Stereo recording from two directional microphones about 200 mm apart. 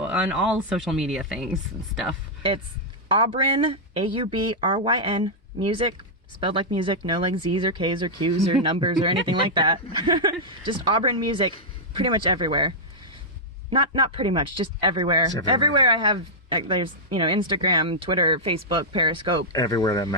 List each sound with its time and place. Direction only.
0.0 s speech: 5° right (ahead or behind)
3.2 s speech: 25° right (ahead or behind)
19.5 s speech: 20° left (ahead or behind)